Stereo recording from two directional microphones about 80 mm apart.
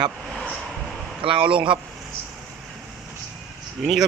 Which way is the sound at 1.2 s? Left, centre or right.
Right.